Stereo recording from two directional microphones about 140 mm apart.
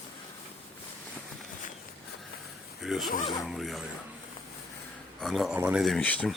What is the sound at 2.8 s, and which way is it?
A man's voice, centre (ahead or behind).